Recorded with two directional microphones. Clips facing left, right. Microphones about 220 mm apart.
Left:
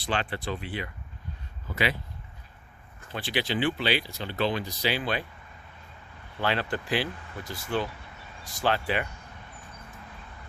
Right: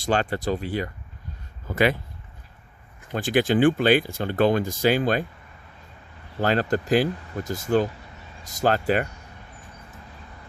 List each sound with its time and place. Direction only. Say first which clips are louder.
0.0 s speech: right 7 dB; 45° right (ahead or behind)
3.1 s speech: right 9 dB; 45° right (ahead or behind)
6.4 s speech: right 6 dB; 45° right (ahead or behind)